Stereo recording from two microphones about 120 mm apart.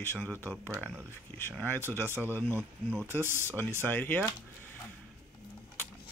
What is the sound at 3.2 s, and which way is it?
Speech, 20° right (ahead or behind).